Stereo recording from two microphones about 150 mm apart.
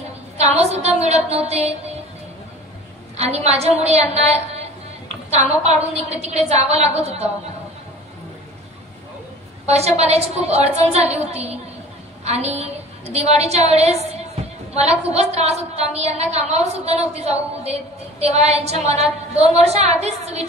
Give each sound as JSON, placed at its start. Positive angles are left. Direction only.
{"t": 0.4, "sound": "a woman's voice", "side_deg": -45}
{"t": 3.2, "sound": "a woman's voice", "side_deg": -45}
{"t": 9.7, "sound": "a woman's voice", "side_deg": -45}